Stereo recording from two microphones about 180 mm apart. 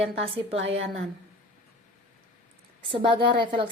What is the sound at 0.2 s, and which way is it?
Speech, 35° right (ahead or behind).